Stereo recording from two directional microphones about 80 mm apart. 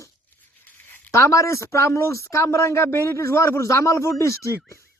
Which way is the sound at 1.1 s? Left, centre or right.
Left.